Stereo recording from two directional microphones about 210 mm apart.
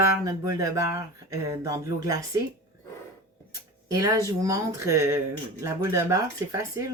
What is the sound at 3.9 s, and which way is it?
Speech, 15° right (ahead or behind).